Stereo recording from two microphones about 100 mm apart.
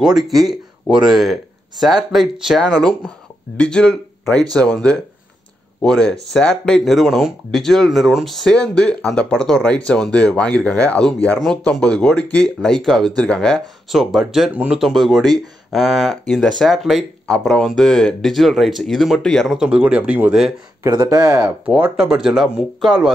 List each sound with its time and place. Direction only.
0.3 s speech: centre (ahead or behind)
3.5 s speech: 10° left (ahead or behind)
13.8 s speech: 5° right (ahead or behind)
14.5 s speech: 15° right (ahead or behind)
14.8 s speech: centre (ahead or behind)
19.6 s speech: 10° right (ahead or behind)
20.9 s speech: 45° right (ahead or behind)
21.6 s speech: 15° right (ahead or behind)